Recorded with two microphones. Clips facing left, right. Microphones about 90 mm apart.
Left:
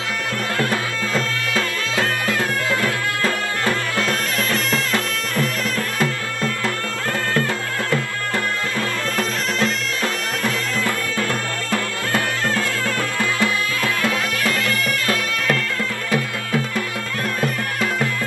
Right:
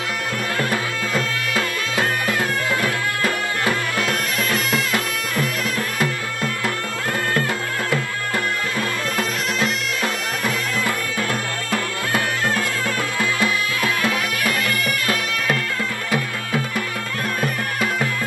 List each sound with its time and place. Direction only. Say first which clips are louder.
0.6 s music: left 1 dB; 15° right (ahead or behind)
9.1 s music: left 1 dB; 15° right (ahead or behind)
14.0 s music: left 1 dB; 20° right (ahead or behind)